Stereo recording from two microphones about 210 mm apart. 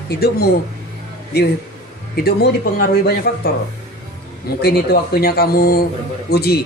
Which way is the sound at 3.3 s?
50° left (ahead or behind).